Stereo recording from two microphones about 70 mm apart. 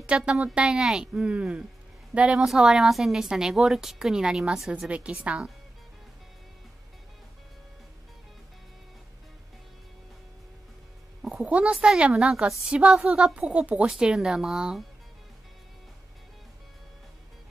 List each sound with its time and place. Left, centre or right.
0.0 s a woman's voice: centre
2.4 s a woman's voice: centre
11.2 s a woman's voice: centre